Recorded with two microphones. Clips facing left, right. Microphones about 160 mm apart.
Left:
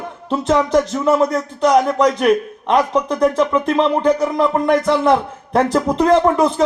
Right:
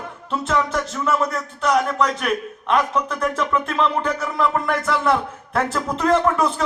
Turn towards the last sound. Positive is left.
turn(degrees=35)  # may be behind; listen again after turning